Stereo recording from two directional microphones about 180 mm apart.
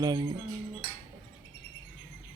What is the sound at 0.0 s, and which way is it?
Music, 20° right (ahead or behind).